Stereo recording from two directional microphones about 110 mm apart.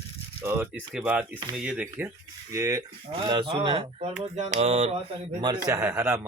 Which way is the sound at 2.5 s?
30° right (ahead or behind).